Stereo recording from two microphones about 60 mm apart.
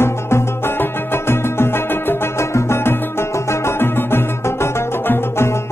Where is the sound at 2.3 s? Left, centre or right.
Left.